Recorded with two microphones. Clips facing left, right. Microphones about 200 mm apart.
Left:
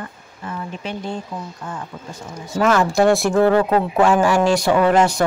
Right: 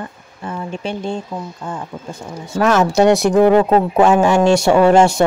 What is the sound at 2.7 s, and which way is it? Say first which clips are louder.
Speech: right 3 dB; 20° right (ahead or behind).